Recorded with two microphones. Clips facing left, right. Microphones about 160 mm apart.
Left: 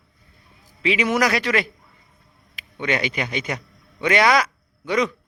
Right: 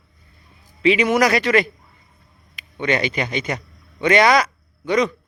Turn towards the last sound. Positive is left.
turn(degrees=5)  # may be behind; listen again after turning